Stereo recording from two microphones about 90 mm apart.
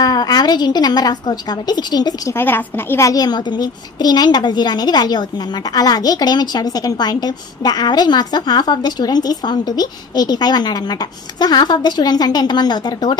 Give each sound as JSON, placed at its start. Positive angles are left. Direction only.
{"t": 0.0, "sound": "a woman's voice", "side_deg": 50}
{"t": 2.2, "sound": "a woman's voice", "side_deg": 25}
{"t": 3.0, "sound": "a woman's voice", "side_deg": 40}